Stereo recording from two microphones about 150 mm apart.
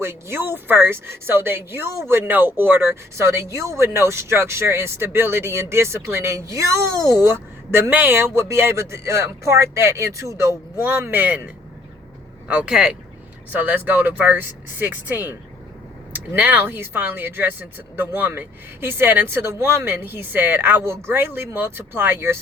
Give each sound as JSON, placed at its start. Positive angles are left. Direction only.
{"t": 0.0, "sound": "speech", "side_deg": -15}